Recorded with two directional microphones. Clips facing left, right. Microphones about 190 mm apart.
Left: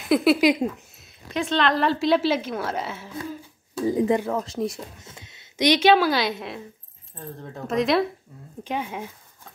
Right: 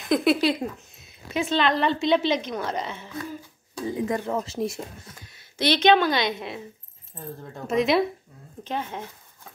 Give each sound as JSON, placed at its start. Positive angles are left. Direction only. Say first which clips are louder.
{"t": 0.0, "sound": "speech", "louder": "left 3 dB", "side_deg": 5}
{"t": 3.8, "sound": "speech", "louder": "left 6 dB", "side_deg": 35}
{"t": 4.3, "sound": "speech", "louder": "left 1 dB", "side_deg": 0}
{"t": 5.0, "sound": "speech", "louder": "left 1 dB", "side_deg": 25}
{"t": 8.6, "sound": "speech", "louder": "left 2 dB", "side_deg": 10}